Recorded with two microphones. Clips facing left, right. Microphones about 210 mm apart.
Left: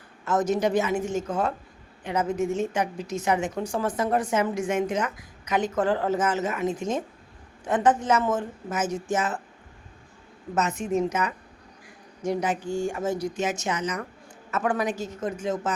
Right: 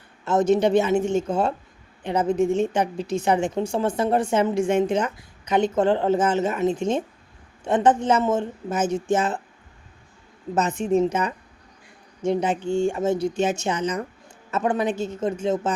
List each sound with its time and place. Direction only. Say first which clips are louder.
0.3 s a woman's voice: right 5 dB; 25° right (ahead or behind)
10.5 s a woman's voice: right 4 dB; 30° right (ahead or behind)